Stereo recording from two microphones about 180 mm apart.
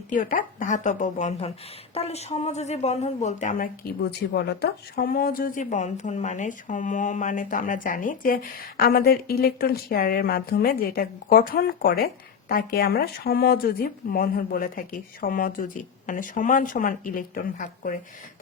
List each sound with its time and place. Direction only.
0.1 s speech: 45° left (ahead or behind)
4.0 s a woman's voice: 65° left (ahead or behind); by 17.9 s 50° left (ahead or behind)